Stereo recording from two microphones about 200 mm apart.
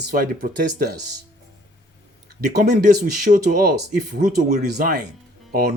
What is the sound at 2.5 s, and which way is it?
Speech, 55° right (ahead or behind).